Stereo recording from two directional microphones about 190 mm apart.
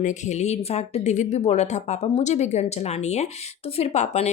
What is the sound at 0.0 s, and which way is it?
Speech, 40° left (ahead or behind).